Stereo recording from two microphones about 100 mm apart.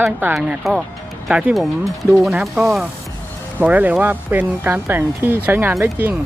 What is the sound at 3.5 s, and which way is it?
Speech, 15° right (ahead or behind).